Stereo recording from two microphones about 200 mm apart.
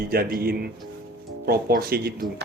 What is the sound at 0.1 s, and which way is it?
Speech, 50° right (ahead or behind).